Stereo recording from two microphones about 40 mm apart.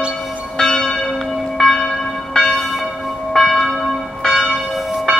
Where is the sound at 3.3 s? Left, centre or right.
Centre.